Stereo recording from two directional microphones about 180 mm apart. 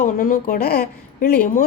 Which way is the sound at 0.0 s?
50° left (ahead or behind).